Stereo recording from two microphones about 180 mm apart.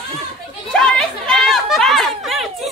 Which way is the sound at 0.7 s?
5° left (ahead or behind).